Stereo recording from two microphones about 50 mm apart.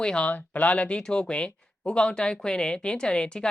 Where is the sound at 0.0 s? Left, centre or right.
Centre.